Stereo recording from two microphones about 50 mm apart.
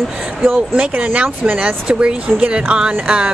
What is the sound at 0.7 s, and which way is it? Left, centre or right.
Speech, right.